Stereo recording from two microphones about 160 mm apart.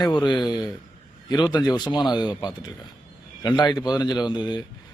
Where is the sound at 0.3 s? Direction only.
25° left (ahead or behind).